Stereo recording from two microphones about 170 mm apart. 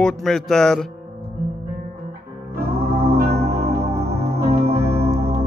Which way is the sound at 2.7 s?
70° right (ahead or behind).